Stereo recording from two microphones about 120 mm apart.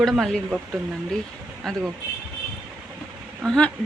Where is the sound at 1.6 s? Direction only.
5° left (ahead or behind).